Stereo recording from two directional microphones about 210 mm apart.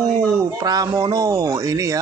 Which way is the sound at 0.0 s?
15° right (ahead or behind).